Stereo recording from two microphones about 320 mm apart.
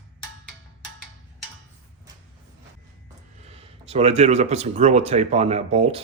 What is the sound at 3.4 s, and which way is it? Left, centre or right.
Speech, centre.